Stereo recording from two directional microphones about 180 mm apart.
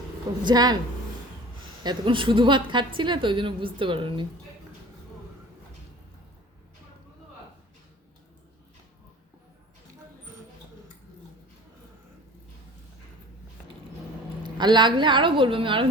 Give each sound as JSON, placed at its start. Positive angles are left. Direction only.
{"t": 0.4, "sound": "a woman's voice", "side_deg": -25}
{"t": 1.8, "sound": "a woman's voice", "side_deg": -25}
{"t": 14.4, "sound": "a woman's voice", "side_deg": -25}